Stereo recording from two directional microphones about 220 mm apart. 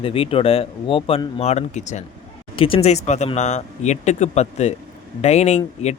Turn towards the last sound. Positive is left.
turn(degrees=30)  # may be behind; listen again after turning